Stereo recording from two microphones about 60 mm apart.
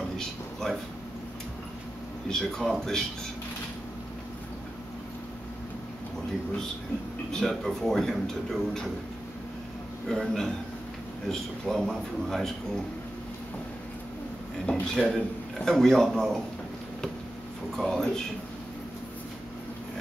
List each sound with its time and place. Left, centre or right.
0.2 s a sound: centre
2.2 s a man's voice: centre
7.2 s speech: centre
10.0 s a man's voice: centre
14.7 s speech: centre
17.7 s speech: centre